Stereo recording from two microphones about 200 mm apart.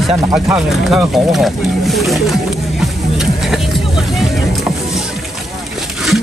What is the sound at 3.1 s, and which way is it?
Music, centre (ahead or behind).